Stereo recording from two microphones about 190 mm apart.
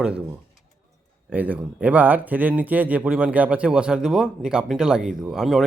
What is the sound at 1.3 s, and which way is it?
Speech, 10° right (ahead or behind).